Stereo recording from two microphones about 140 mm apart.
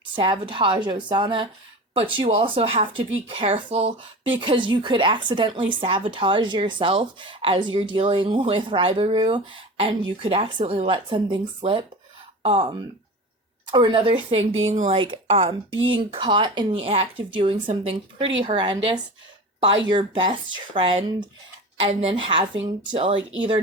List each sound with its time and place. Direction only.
0.2 s speech: 35° right (ahead or behind)